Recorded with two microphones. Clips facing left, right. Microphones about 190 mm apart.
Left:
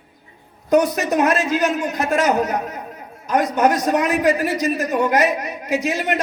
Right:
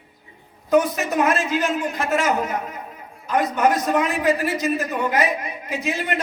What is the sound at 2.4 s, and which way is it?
Speech, 80° left.